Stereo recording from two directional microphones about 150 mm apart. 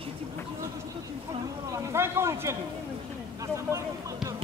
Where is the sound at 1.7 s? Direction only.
15° right (ahead or behind).